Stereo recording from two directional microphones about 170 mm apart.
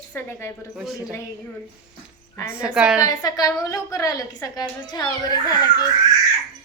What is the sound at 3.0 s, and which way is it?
A child's voice, 20° left (ahead or behind).